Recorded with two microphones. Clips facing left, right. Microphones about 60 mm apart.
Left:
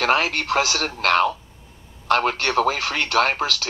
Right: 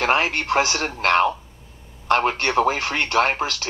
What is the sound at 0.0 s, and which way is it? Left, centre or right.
Speech, right.